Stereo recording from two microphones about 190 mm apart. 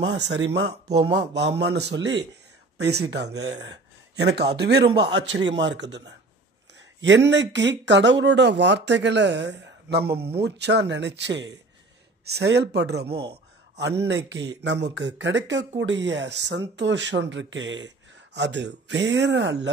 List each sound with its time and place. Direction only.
0.1 s speech: 65° right (ahead or behind)
0.8 s speech: 35° right (ahead or behind)
1.1 s speech: 65° right (ahead or behind)